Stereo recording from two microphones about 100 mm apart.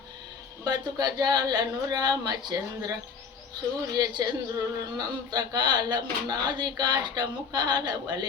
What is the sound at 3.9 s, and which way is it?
Speech, 40° right (ahead or behind).